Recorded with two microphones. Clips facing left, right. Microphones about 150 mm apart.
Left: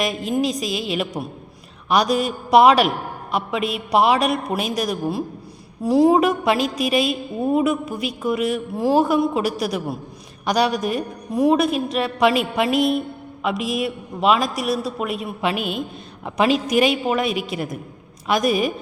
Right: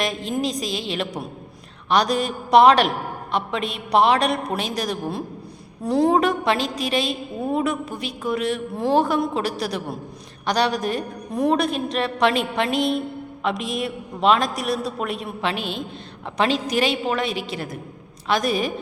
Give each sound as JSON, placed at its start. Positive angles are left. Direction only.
{"t": 0.0, "sound": "a woman's voice", "side_deg": 5}